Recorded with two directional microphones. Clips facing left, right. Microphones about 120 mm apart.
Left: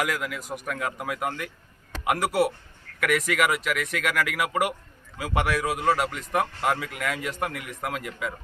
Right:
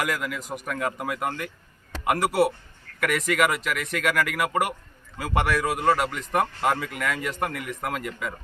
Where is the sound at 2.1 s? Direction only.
45° right (ahead or behind).